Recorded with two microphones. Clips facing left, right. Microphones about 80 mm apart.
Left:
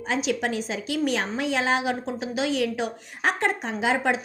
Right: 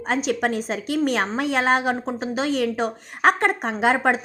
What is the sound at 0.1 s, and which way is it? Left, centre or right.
A woman's voice, right.